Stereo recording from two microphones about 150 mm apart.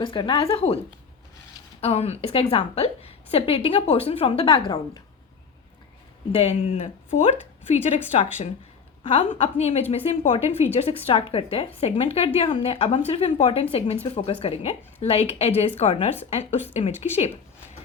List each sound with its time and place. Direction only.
0.0 s a woman's voice: 35° left (ahead or behind)
1.8 s a woman's voice: 45° left (ahead or behind)
6.3 s a woman's voice: 40° left (ahead or behind)
9.0 s a woman's voice: 40° left (ahead or behind)